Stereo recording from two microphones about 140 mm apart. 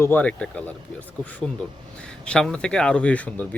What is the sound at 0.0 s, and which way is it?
Speech, 10° left (ahead or behind).